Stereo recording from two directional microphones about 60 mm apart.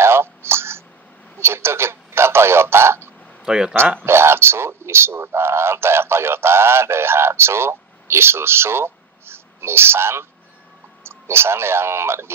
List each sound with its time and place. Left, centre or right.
0.0 s a sound: right
3.4 s speech: centre
3.7 s speech: right